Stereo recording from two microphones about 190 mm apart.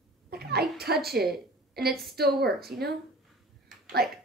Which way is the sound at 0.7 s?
55° right (ahead or behind).